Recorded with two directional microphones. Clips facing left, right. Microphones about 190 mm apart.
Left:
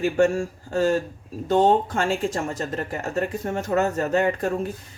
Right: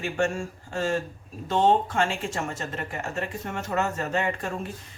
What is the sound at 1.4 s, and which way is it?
Speech, 40° left (ahead or behind).